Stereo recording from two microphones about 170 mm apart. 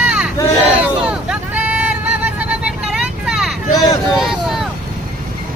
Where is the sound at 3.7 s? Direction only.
20° left (ahead or behind).